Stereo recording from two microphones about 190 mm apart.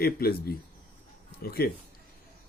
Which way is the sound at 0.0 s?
55° left (ahead or behind).